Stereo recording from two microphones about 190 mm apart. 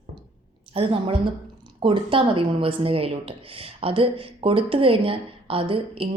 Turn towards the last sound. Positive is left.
turn(degrees=-30)  # may be behind; listen again after turning